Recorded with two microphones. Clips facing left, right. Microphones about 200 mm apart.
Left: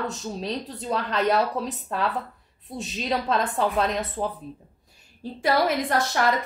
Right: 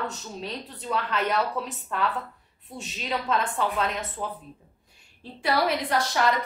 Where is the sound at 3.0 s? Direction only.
35° left (ahead or behind).